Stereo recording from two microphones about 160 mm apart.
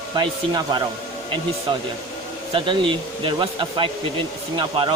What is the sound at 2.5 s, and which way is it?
Speech, 30° right (ahead or behind).